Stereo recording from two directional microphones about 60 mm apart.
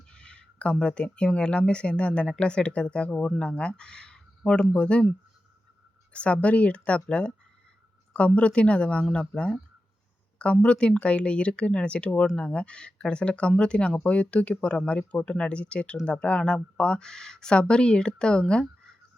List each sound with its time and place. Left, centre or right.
0.1 s speech: centre
6.1 s speech: left